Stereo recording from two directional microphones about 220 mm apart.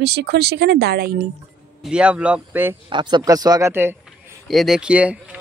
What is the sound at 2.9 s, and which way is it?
Speech, 20° right (ahead or behind).